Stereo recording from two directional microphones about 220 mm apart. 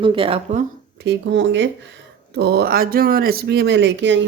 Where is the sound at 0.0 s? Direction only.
25° right (ahead or behind).